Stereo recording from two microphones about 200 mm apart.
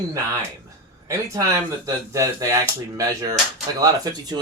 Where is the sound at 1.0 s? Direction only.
15° right (ahead or behind).